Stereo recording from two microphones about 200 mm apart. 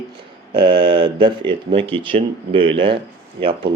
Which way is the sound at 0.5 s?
25° right (ahead or behind).